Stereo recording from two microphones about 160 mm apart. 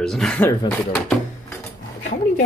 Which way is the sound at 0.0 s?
5° left (ahead or behind).